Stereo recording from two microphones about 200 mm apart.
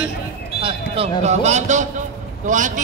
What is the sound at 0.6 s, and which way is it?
Basketball bounce, 30° right (ahead or behind).